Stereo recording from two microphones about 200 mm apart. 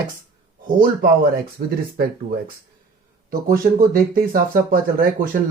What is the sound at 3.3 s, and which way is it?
Speech, 45° right (ahead or behind).